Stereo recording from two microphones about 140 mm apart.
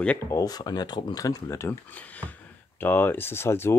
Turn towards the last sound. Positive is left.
turn(degrees=20)  # may be behind; listen again after turning